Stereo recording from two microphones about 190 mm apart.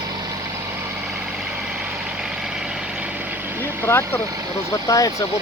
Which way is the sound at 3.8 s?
10° left (ahead or behind).